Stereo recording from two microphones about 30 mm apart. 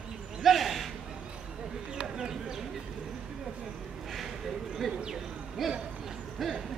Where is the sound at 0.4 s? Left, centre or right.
Centre.